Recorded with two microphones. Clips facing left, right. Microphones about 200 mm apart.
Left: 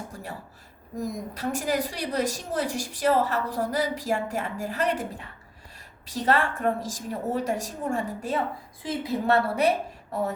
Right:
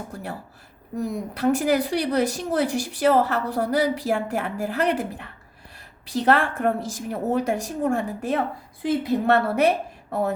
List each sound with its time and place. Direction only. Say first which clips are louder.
0.9 s a woman's voice: right 4 dB; 65° right (ahead or behind)
6.2 s a woman's voice: right 3 dB; 60° right (ahead or behind)